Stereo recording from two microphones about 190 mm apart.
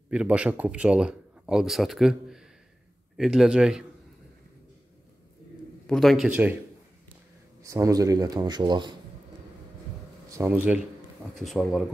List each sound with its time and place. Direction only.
0.1 s a man's voice: 5° right (ahead or behind)
5.9 s speech: centre (ahead or behind)
7.6 s speech: 15° right (ahead or behind)
10.3 s speech: 10° right (ahead or behind)